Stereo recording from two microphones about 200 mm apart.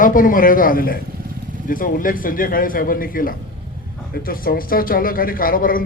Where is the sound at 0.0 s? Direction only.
45° left (ahead or behind).